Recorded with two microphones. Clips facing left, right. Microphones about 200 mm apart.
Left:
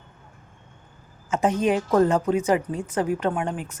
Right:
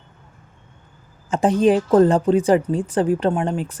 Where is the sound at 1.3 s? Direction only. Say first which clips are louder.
Right 5 dB; 30° right (ahead or behind).